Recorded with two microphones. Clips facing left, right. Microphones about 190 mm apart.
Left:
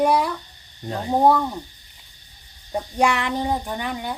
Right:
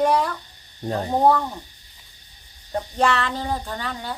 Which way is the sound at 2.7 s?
15° left (ahead or behind).